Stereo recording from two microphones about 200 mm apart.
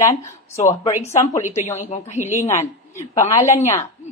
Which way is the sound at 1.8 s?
35° left (ahead or behind).